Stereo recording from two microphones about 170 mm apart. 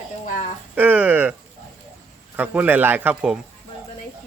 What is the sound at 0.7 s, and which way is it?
Speech, 10° right (ahead or behind).